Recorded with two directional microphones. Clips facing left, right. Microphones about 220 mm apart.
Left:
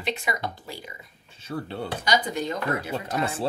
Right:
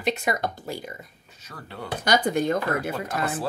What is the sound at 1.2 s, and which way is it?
Speech, 30° left (ahead or behind).